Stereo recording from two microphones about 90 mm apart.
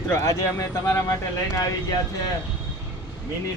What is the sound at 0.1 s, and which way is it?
Speech, 35° left (ahead or behind).